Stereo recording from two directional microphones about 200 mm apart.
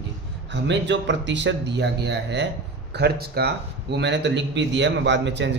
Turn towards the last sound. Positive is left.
turn(degrees=-65)  # may be behind; listen again after turning